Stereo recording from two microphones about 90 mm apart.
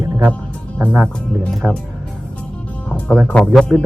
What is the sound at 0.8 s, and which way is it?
Speech, 20° right (ahead or behind).